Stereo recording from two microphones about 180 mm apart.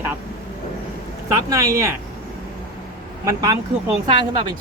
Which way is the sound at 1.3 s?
15° right (ahead or behind).